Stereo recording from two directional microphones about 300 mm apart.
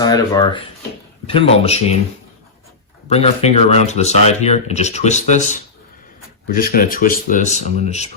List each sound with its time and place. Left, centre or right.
0.0 s speech: centre
3.1 s speech: left